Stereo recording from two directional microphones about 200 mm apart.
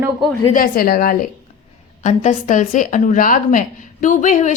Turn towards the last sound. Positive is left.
turn(degrees=40)  # may be behind; listen again after turning